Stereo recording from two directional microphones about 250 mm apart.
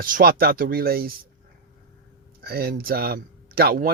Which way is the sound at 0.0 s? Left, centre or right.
Right.